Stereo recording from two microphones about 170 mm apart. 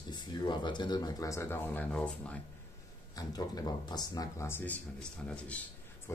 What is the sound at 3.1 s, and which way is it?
A man's voice, 20° left (ahead or behind).